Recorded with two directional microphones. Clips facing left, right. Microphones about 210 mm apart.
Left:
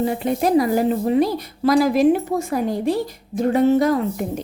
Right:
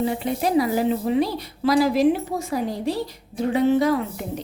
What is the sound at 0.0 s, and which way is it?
A woman's voice, 45° left (ahead or behind).